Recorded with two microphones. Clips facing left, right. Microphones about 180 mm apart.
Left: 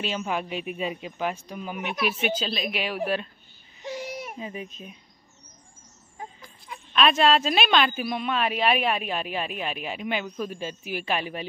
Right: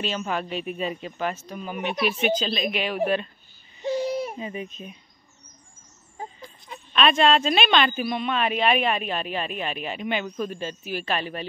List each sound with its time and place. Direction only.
0.0 s a man's voice: 10° left (ahead or behind)
3.8 s babbling: 30° right (ahead or behind)
4.4 s a woman's voice: centre (ahead or behind)
6.1 s a sound: 25° right (ahead or behind)
6.9 s a woman's voice: 5° left (ahead or behind)